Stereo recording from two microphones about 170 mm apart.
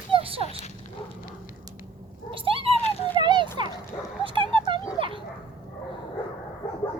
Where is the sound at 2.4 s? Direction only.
35° right (ahead or behind).